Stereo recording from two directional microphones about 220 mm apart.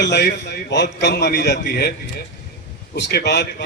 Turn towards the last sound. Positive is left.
turn(degrees=50)  # may be behind; listen again after turning